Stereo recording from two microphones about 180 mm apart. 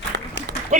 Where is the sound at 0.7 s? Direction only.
40° right (ahead or behind).